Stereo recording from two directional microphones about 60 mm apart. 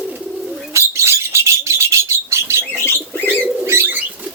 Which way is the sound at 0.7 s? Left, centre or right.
Right.